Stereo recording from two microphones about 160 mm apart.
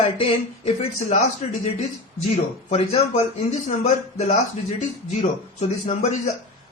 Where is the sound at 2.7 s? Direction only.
40° left (ahead or behind).